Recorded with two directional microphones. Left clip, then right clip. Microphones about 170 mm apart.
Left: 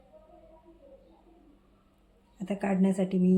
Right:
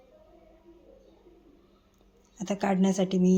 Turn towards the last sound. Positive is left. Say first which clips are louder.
# right 2 dB
turn(degrees=-20)  # may be behind; listen again after turning